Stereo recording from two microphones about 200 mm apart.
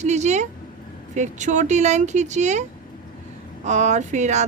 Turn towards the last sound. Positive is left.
turn(degrees=-35)  # may be behind; listen again after turning